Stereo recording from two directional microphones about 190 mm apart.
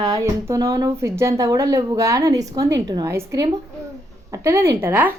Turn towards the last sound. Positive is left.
turn(degrees=-10)  # may be behind; listen again after turning